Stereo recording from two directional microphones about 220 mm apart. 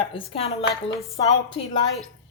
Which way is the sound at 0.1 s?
25° left (ahead or behind).